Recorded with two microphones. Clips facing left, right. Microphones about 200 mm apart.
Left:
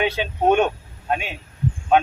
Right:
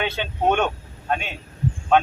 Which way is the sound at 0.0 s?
10° left (ahead or behind).